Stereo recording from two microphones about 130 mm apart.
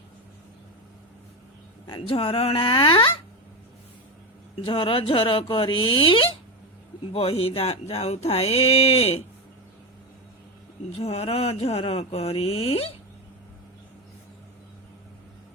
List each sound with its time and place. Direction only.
1.9 s speech: 45° left (ahead or behind)
4.6 s speech: 40° left (ahead or behind)
10.9 s speech: 55° left (ahead or behind)